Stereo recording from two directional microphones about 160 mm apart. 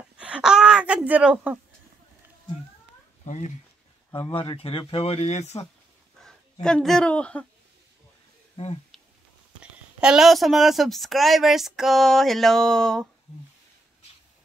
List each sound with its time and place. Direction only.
0.0 s a sound: 5° right (ahead or behind)
3.3 s speech: 50° left (ahead or behind)
4.1 s speech: 30° left (ahead or behind)
6.2 s speech: 5° left (ahead or behind)
9.6 s a woman's voice: 5° right (ahead or behind)